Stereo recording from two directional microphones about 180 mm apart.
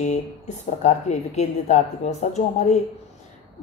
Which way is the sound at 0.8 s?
40° left (ahead or behind).